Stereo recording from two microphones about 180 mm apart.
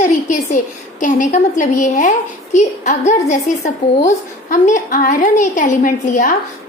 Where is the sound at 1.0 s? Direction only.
45° left (ahead or behind).